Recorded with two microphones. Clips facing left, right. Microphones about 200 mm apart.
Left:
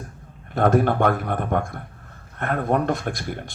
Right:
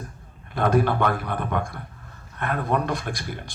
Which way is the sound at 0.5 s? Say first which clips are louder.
Left 3 dB; 50° left (ahead or behind).